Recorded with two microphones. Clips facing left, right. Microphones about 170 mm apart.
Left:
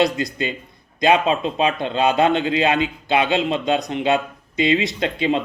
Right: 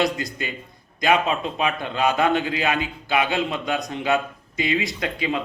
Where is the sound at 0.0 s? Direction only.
25° left (ahead or behind).